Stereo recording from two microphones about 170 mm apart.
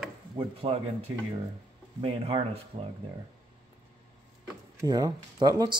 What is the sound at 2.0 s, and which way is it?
Speech, 30° right (ahead or behind).